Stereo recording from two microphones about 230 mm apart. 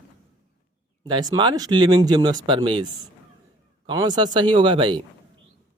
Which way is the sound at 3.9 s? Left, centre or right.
Centre.